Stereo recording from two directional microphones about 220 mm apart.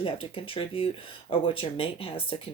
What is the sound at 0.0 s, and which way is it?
Speech, 25° left (ahead or behind).